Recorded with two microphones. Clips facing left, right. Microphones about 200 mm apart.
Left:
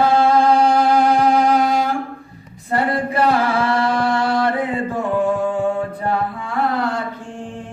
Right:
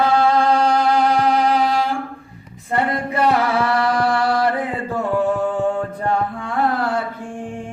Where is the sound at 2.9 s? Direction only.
30° left (ahead or behind).